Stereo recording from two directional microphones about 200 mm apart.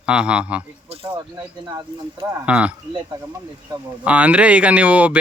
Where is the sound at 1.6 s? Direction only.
20° right (ahead or behind).